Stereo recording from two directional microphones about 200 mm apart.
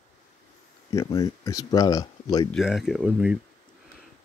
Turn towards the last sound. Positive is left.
turn(degrees=-5)  # may be behind; listen again after turning